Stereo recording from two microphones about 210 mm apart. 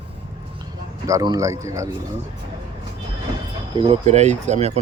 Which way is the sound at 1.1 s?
15° right (ahead or behind).